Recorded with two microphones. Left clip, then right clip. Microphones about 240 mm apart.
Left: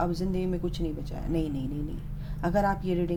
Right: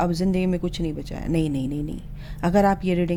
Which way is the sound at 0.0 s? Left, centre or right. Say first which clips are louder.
Right 6 dB; right.